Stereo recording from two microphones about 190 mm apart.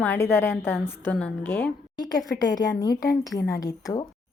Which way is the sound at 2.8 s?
20° left (ahead or behind).